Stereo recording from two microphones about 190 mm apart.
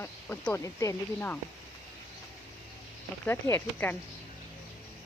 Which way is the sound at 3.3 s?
10° left (ahead or behind).